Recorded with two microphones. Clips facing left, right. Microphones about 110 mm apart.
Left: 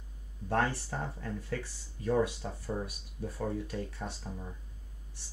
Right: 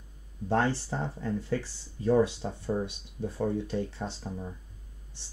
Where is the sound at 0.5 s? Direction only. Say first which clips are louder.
Right 4 dB; 30° right (ahead or behind).